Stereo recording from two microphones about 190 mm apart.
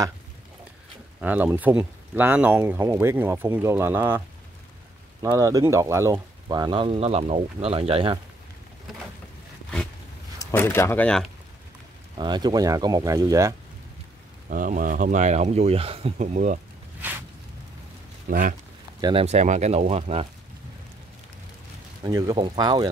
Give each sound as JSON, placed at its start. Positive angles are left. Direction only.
{"t": 1.2, "sound": "speech", "side_deg": -10}
{"t": 5.2, "sound": "speech", "side_deg": -20}
{"t": 10.4, "sound": "speech", "side_deg": 10}
{"t": 12.2, "sound": "speech", "side_deg": -20}
{"t": 14.5, "sound": "speech", "side_deg": -45}
{"t": 18.3, "sound": "speech", "side_deg": -50}
{"t": 18.9, "sound": "speech", "side_deg": -20}
{"t": 19.2, "sound": "speech", "side_deg": -40}
{"t": 22.0, "sound": "speech", "side_deg": -20}